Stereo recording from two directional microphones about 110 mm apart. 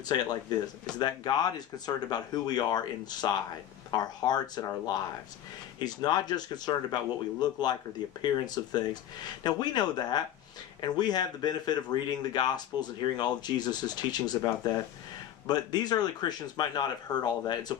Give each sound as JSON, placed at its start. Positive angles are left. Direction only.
{"t": 0.1, "sound": "speech", "side_deg": 45}